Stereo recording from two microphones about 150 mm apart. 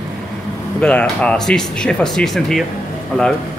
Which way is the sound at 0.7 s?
5° left (ahead or behind).